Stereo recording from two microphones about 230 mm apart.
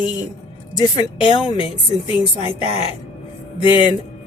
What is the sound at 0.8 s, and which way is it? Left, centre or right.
Speech, centre.